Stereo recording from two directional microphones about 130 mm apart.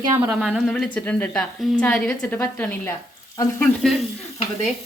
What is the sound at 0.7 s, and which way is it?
A woman's voice, 10° left (ahead or behind).